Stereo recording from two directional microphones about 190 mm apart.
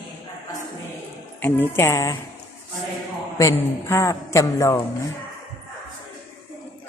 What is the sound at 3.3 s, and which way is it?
A man's voice, 15° left (ahead or behind).